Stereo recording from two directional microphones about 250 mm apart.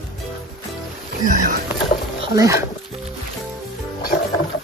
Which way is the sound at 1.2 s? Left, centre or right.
Right.